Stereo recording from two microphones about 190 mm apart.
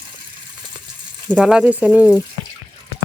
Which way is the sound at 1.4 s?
5° right (ahead or behind).